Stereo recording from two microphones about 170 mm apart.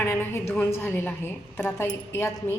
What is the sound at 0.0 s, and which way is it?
A woman's voice, 15° left (ahead or behind).